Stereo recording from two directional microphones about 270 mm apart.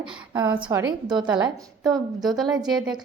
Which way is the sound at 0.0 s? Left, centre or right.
Centre.